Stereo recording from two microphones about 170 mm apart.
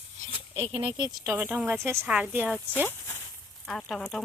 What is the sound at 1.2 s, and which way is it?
A woman's voice, 10° right (ahead or behind).